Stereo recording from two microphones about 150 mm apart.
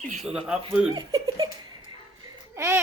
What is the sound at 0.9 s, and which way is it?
Giggle, 30° right (ahead or behind).